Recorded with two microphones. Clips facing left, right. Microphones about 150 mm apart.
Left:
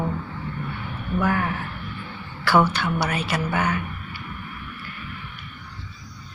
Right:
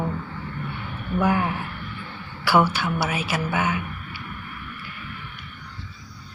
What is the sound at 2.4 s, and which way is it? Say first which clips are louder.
A woman's voice: even; 5° right (ahead or behind).